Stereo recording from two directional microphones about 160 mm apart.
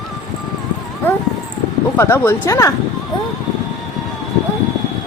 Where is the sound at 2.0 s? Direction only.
15° left (ahead or behind).